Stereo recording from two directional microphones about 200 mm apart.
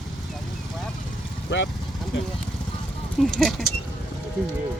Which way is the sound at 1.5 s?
60° left (ahead or behind).